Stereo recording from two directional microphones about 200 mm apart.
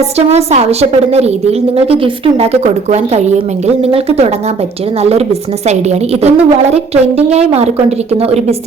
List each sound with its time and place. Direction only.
0.2 s a woman's voice: 30° right (ahead or behind)
6.2 s a woman's voice: 30° right (ahead or behind)